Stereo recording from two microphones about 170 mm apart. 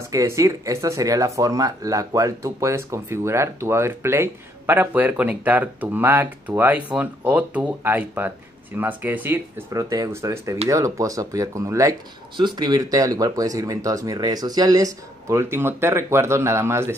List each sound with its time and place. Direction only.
0.1 s speech: 20° right (ahead or behind)